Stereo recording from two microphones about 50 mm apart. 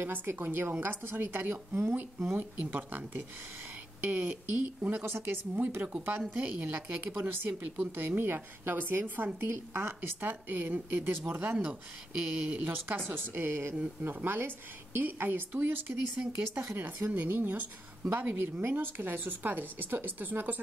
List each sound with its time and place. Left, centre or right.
0.0 s a woman's voice: right
1.8 s speech: right
2.6 s a woman's voice: right
5.0 s speech: right
6.3 s a woman's voice: right
7.2 s a woman's voice: right